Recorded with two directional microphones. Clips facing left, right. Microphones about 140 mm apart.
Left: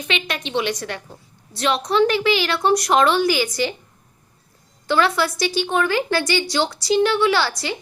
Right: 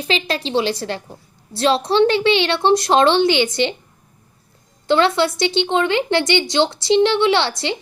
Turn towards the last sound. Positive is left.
turn(degrees=-25)  # may be behind; listen again after turning